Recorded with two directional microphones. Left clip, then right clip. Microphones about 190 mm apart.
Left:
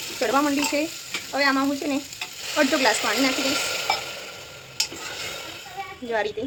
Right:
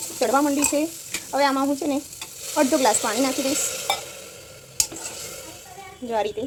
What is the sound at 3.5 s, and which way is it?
Stir, 20° left (ahead or behind).